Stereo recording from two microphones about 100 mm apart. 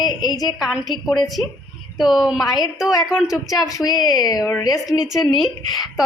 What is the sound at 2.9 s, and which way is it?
Speech, 35° left (ahead or behind).